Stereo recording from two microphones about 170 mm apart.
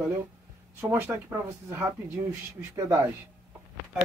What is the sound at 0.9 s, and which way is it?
Speech, 15° right (ahead or behind).